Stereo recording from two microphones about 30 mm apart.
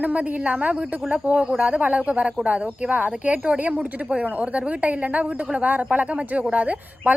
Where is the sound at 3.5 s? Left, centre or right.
Right.